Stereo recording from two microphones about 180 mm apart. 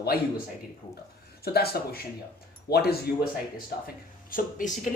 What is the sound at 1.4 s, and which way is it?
Speech, 60° left (ahead or behind).